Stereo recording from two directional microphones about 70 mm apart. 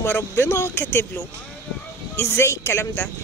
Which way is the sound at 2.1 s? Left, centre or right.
Left.